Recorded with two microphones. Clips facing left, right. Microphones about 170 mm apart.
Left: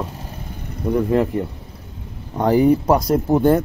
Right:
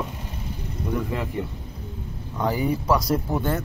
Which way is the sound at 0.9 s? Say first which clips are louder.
Left 8 dB; 45° left (ahead or behind).